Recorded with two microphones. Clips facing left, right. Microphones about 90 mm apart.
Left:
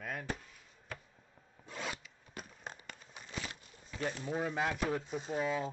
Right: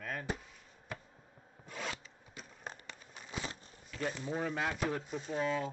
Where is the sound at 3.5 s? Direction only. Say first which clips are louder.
Right 3 dB; 35° right (ahead or behind).